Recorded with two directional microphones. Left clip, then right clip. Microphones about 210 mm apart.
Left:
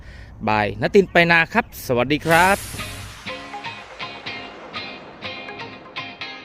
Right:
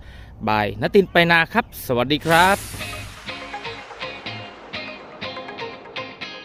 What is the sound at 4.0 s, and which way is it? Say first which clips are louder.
Music: left 2 dB; centre (ahead or behind).